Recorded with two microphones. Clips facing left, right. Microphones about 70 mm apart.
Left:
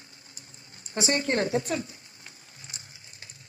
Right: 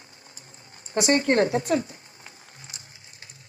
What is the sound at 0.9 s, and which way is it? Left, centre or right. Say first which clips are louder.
Speech: right 6 dB; right.